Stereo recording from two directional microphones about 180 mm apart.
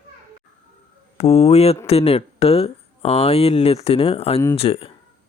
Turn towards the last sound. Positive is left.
turn(degrees=30)  # may be behind; listen again after turning